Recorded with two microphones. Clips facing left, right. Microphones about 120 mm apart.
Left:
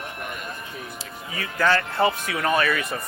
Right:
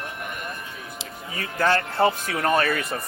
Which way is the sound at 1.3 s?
35° right (ahead or behind).